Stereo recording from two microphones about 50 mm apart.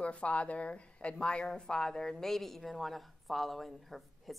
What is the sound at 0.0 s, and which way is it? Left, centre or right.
A woman's voice, left.